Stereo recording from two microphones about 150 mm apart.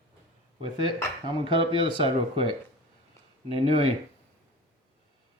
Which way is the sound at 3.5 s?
40° right (ahead or behind).